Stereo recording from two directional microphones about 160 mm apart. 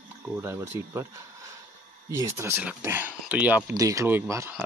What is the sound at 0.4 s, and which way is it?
Speech, 15° right (ahead or behind).